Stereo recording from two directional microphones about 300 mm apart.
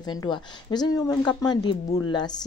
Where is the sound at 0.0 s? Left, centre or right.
Centre.